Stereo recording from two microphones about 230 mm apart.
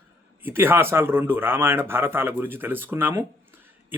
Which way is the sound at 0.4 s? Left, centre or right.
Centre.